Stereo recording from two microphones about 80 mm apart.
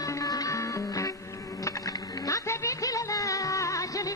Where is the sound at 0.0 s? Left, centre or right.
Left.